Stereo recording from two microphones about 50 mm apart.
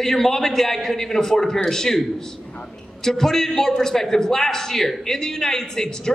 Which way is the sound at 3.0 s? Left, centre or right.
Centre.